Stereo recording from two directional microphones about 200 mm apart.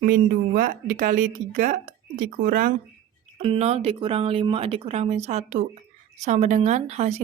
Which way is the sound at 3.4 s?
30° right (ahead or behind).